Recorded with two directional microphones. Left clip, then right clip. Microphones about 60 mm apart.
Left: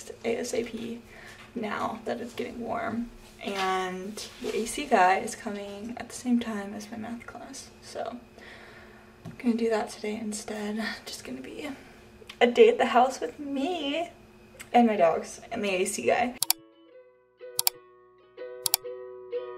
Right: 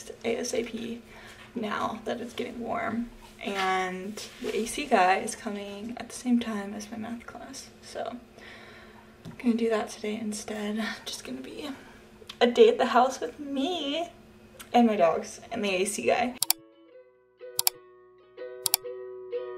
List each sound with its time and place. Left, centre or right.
0.2 s a woman's voice: centre
12.5 s a woman's voice: right
13.1 s a woman's voice: centre
18.4 s music: centre